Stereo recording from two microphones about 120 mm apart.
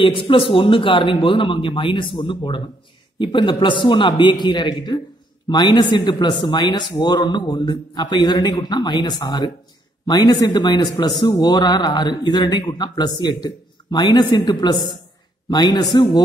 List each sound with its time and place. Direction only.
0.0 s a man's voice: 45° left (ahead or behind)